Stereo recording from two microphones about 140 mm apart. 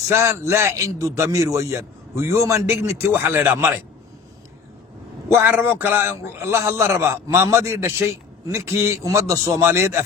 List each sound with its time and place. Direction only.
0.1 s a man's voice: 20° right (ahead or behind)
5.3 s a man's voice: 15° right (ahead or behind)